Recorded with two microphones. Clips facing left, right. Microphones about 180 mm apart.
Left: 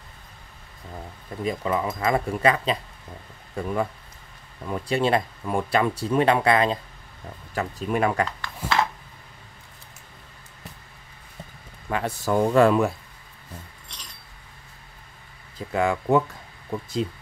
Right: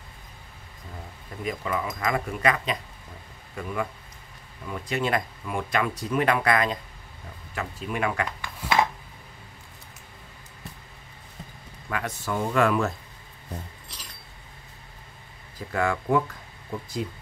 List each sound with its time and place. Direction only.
1.4 s speech: 30° left (ahead or behind)
8.3 s dishes: 15° right (ahead or behind)
11.9 s speech: 30° left (ahead or behind)
13.9 s a sound: 5° right (ahead or behind)
15.5 s speech: 20° left (ahead or behind)